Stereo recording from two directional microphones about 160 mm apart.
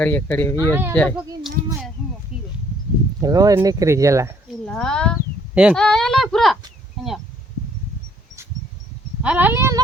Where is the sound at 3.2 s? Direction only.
25° right (ahead or behind).